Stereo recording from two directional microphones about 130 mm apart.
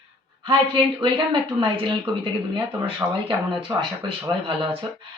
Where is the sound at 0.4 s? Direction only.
45° right (ahead or behind).